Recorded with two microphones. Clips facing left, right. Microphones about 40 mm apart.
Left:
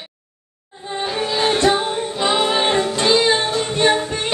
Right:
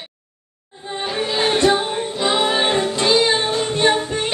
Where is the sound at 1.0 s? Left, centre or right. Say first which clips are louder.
Left 1 dB; centre.